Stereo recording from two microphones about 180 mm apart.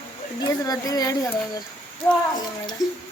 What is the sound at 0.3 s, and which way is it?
Speech, 20° left (ahead or behind).